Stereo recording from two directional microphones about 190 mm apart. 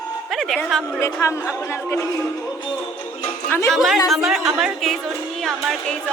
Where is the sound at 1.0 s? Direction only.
15° left (ahead or behind).